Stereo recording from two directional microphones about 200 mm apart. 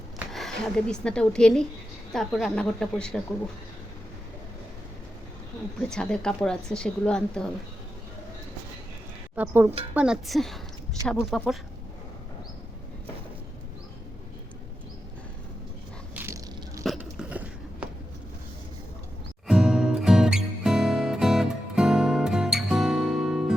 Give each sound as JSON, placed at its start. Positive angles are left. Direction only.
{"t": 0.3, "sound": "speech", "side_deg": 0}
{"t": 5.9, "sound": "speech", "side_deg": 5}
{"t": 9.3, "sound": "speech", "side_deg": -10}
{"t": 16.1, "sound": "crushing", "side_deg": -15}
{"t": 16.8, "sound": "biting", "side_deg": 0}
{"t": 19.5, "sound": "music", "side_deg": -5}